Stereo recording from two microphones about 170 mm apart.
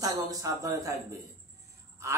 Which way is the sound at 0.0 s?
20° right (ahead or behind).